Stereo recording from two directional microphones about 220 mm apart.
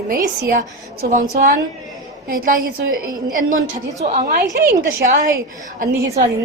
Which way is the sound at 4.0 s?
30° right (ahead or behind).